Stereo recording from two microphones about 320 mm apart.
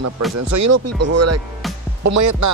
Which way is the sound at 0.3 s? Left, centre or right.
Right.